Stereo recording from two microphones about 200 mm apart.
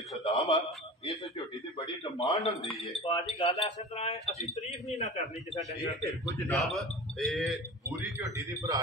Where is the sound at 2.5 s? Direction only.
30° left (ahead or behind).